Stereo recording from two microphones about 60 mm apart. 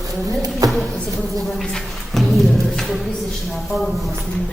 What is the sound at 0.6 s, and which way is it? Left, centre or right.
Speech, right.